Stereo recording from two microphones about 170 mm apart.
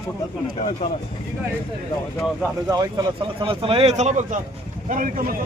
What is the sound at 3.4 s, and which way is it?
Speech, 30° right (ahead or behind).